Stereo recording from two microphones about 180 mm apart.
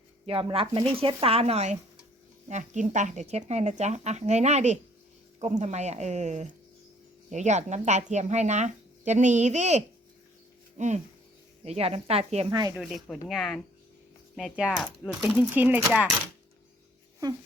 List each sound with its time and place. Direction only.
0.3 s speech: 30° right (ahead or behind)
12.5 s speech: 20° right (ahead or behind)
13.1 s speech: centre (ahead or behind)